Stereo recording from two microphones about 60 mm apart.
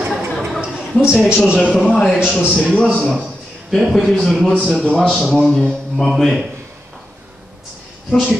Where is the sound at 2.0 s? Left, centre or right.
Centre.